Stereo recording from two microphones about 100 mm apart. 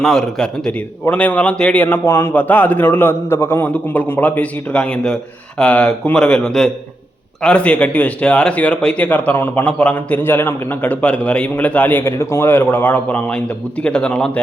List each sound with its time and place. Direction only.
0.0 s a man's voice: 5° left (ahead or behind); by 2.3 s 25° left (ahead or behind)
2.3 s speech: 15° left (ahead or behind)